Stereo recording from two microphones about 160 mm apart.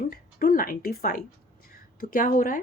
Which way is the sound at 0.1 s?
65° left (ahead or behind).